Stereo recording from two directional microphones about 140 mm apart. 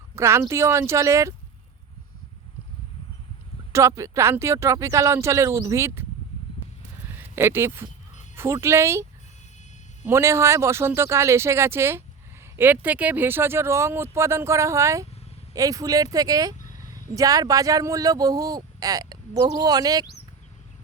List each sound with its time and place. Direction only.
0.2 s speech: 20° right (ahead or behind)
3.7 s speech: 20° right (ahead or behind)
7.2 s speech: 15° right (ahead or behind)
10.1 s speech: 20° right (ahead or behind)